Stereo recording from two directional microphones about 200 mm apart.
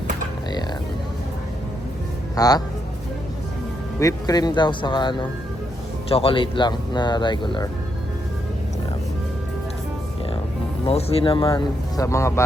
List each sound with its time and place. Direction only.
2.3 s speech: 20° left (ahead or behind)
4.0 s speech: 20° left (ahead or behind)
10.8 s speech: 30° left (ahead or behind)